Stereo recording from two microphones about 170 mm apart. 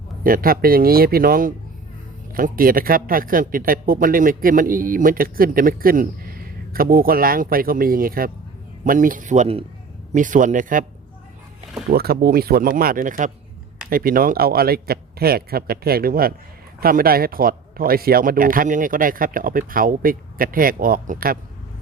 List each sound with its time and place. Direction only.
0.2 s a man's voice: 55° right (ahead or behind)
11.9 s speech: 65° right (ahead or behind)